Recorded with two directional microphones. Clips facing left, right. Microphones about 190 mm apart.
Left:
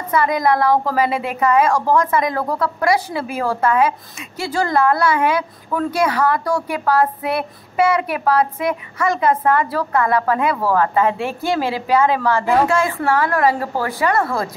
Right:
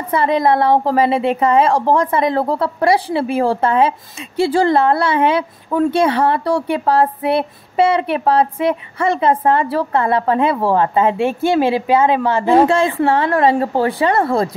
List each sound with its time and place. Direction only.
0.1 s a woman's voice: 30° right (ahead or behind)